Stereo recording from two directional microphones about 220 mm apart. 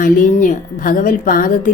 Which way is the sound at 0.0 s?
35° left (ahead or behind).